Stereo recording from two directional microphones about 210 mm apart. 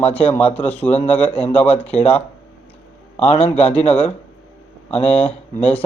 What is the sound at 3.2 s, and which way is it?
Speech, 30° left (ahead or behind).